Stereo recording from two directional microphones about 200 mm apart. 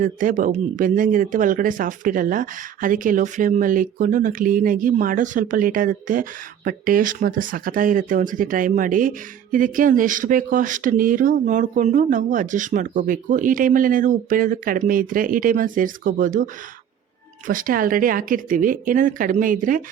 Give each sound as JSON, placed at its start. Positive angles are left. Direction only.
{"t": 0.0, "sound": "speech", "side_deg": -40}